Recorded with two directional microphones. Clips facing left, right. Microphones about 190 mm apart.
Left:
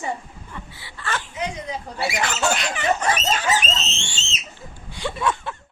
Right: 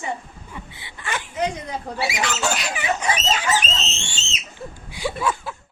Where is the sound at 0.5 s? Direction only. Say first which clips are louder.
Even; 15° right (ahead or behind).